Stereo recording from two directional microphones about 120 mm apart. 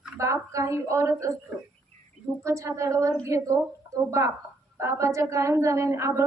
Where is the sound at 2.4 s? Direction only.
25° right (ahead or behind).